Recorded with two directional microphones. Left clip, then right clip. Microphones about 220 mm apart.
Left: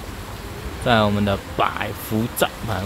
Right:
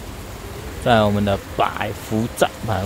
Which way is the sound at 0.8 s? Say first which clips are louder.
Right 2 dB; 5° right (ahead or behind).